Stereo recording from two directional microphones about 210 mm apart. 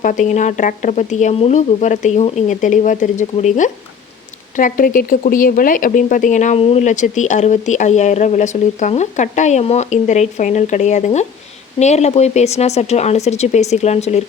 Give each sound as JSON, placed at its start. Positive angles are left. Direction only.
{"t": 0.0, "sound": "speech", "side_deg": 35}